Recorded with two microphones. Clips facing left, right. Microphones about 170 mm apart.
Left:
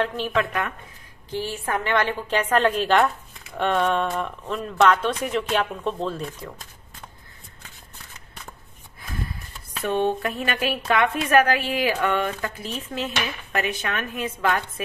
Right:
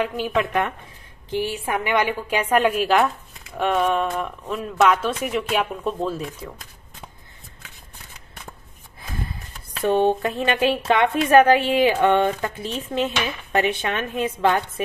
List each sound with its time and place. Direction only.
0.0 s a woman's voice: 15° right (ahead or behind)
0.5 s a woman's voice: 30° right (ahead or behind)
1.3 s a woman's voice: 15° right (ahead or behind)
9.8 s speech: 35° right (ahead or behind)
10.2 s a woman's voice: 25° right (ahead or behind)